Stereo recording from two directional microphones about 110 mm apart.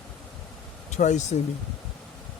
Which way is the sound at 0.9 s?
90° left.